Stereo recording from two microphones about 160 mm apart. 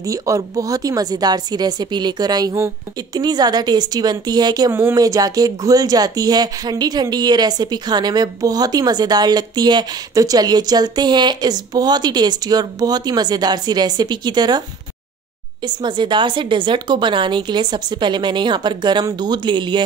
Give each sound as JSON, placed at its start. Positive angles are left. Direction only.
{"t": 0.0, "sound": "a woman's voice", "side_deg": -20}
{"t": 15.6, "sound": "a woman's voice", "side_deg": -30}